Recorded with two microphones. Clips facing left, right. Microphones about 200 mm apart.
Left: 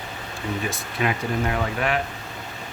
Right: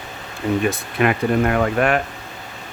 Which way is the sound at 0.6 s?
60° right (ahead or behind).